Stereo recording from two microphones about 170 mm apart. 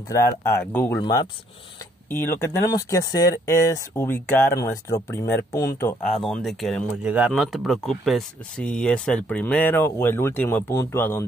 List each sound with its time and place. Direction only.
0.1 s speech: 20° left (ahead or behind)
1.0 s speech: 25° left (ahead or behind)
2.0 s speech: 15° left (ahead or behind)
6.0 s speech: 5° left (ahead or behind)